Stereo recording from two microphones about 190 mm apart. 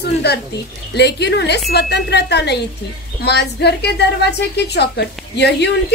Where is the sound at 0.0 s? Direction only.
60° left (ahead or behind).